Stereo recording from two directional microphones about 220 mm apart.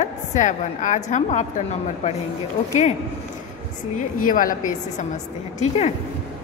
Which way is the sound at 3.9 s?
40° left (ahead or behind).